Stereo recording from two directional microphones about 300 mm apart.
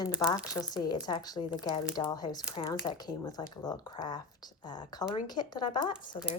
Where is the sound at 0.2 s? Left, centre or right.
Centre.